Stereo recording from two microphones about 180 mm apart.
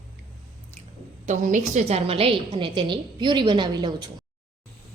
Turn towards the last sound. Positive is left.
turn(degrees=-25)  # may be behind; listen again after turning